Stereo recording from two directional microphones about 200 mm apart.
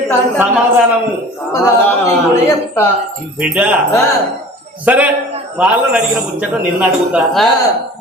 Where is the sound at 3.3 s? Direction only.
5° right (ahead or behind).